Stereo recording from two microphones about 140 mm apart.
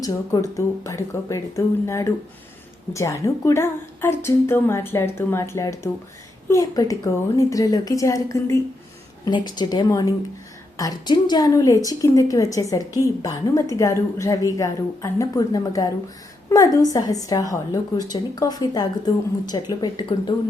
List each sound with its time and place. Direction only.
0.5 s a woman's voice: 20° left (ahead or behind)